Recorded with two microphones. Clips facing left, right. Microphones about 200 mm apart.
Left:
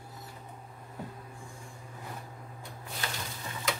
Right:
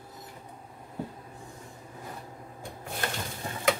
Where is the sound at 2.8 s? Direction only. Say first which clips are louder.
Right 5 dB; 55° right (ahead or behind).